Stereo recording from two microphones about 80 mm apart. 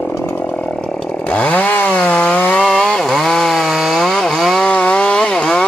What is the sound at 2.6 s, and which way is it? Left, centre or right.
Chainsaw, centre.